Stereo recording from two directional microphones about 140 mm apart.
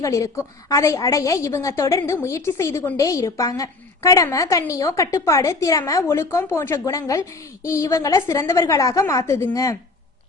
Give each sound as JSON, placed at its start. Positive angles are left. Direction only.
{"t": 0.0, "sound": "a woman's voice", "side_deg": 20}